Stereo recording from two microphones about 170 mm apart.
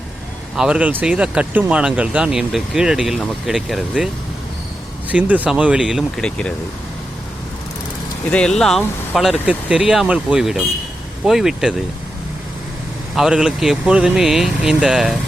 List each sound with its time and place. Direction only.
0.5 s speech: 5° right (ahead or behind)
5.1 s speech: 10° right (ahead or behind)
8.3 s speech: 5° left (ahead or behind)
13.1 s speech: 5° right (ahead or behind)